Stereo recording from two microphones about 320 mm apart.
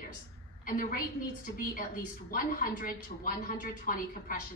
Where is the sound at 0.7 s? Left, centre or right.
Left.